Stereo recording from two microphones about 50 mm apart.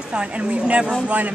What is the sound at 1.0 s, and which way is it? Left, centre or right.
Speech, right.